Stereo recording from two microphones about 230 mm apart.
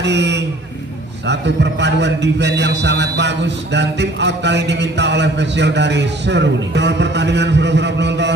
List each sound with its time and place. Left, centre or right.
0.0 s a man's voice: right